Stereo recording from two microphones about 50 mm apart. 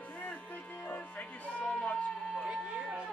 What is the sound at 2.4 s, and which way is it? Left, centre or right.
Siren, right.